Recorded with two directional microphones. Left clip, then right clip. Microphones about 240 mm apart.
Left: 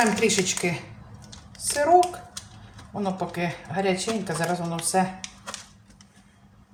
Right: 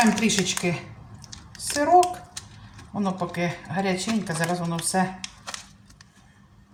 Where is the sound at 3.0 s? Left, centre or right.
Centre.